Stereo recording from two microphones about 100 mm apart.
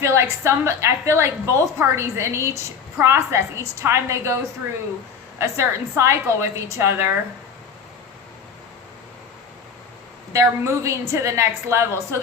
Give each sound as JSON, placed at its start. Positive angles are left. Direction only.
{"t": 0.0, "sound": "a woman's voice", "side_deg": -25}
{"t": 5.4, "sound": "a woman's voice", "side_deg": -30}
{"t": 10.3, "sound": "a woman's voice", "side_deg": -30}